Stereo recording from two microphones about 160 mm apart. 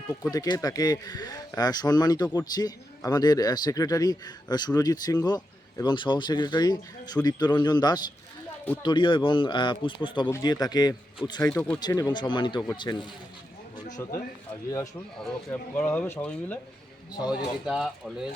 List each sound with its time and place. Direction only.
0.1 s speech: 20° left (ahead or behind)
11.4 s speech: 5° left (ahead or behind)
11.8 s speech: 25° left (ahead or behind)
14.0 s speech: 15° left (ahead or behind)
15.8 s speech: 10° left (ahead or behind)
17.1 s speech: 25° left (ahead or behind)
17.7 s speech: centre (ahead or behind)